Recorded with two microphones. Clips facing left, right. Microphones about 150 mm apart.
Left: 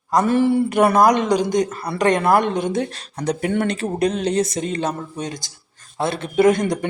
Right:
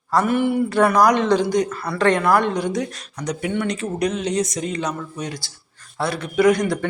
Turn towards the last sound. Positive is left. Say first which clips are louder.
# left 1 dB
turn(degrees=20)  # may be behind; listen again after turning